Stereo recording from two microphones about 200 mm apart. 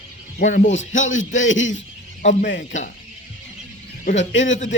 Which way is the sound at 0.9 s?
75° left (ahead or behind).